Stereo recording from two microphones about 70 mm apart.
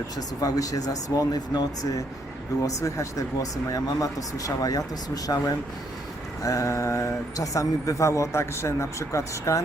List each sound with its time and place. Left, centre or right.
0.2 s speech: left
2.6 s speech: left
6.4 s speech: left